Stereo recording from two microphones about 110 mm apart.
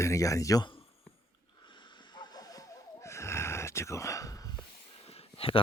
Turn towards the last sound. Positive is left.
turn(degrees=55)  # may be behind; listen again after turning